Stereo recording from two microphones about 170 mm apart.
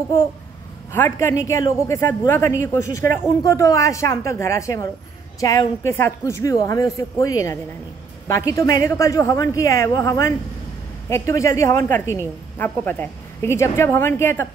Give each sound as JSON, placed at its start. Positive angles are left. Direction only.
{"t": 0.9, "sound": "a woman's voice", "side_deg": 15}